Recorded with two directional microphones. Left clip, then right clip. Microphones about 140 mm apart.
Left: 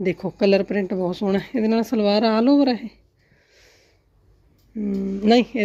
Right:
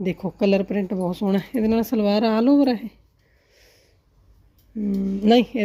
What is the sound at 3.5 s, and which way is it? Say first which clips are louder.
Sniff: left 1 dB; 25° right (ahead or behind).